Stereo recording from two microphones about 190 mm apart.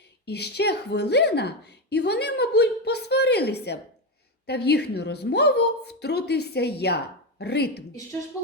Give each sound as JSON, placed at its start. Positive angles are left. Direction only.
{"t": 0.3, "sound": "a woman's voice", "side_deg": 60}